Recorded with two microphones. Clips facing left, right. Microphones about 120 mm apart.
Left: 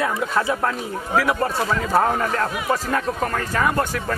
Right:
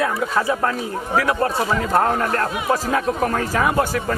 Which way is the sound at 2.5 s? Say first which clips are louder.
Right 2 dB; 20° right (ahead or behind).